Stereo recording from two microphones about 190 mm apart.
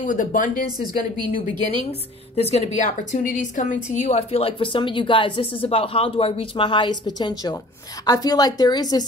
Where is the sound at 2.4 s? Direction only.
35° left (ahead or behind).